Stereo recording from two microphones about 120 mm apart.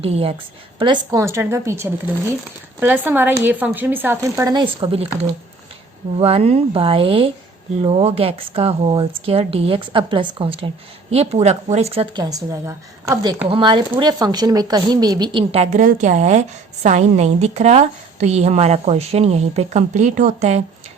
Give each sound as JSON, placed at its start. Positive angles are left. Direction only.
{"t": 0.0, "sound": "speech", "side_deg": -55}
{"t": 0.8, "sound": "a woman's voice", "side_deg": -40}
{"t": 1.2, "sound": "a woman's voice", "side_deg": -20}
{"t": 4.5, "sound": "speech", "side_deg": -45}
{"t": 6.1, "sound": "speech", "side_deg": -55}
{"t": 12.1, "sound": "a woman's voice", "side_deg": -35}
{"t": 13.5, "sound": "speech", "side_deg": -45}
{"t": 14.0, "sound": "a woman's voice", "side_deg": -35}
{"t": 15.5, "sound": "a woman's voice", "side_deg": -75}